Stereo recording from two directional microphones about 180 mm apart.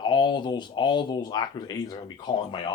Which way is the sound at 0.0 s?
25° left (ahead or behind).